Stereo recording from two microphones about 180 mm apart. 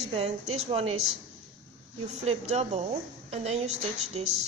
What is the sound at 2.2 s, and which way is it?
Female singing, 35° right (ahead or behind).